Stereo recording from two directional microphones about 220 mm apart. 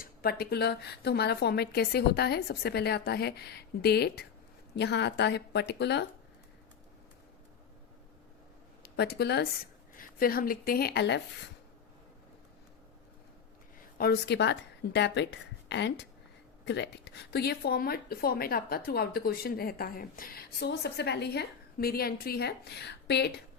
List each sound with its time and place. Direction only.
0.0 s speech: 45° left (ahead or behind)
8.8 s speech: 45° left (ahead or behind)
14.0 s a woman's voice: 50° left (ahead or behind)